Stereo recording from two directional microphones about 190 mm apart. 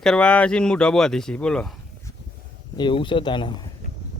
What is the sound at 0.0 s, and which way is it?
Speech, 5° left (ahead or behind).